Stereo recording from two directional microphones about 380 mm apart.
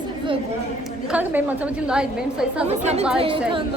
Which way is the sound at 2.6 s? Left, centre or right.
Centre.